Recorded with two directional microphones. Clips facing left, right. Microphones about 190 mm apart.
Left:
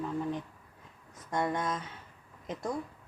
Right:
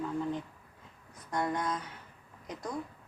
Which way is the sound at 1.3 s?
25° left (ahead or behind).